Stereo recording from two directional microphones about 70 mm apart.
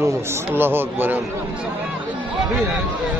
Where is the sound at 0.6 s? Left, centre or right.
Right.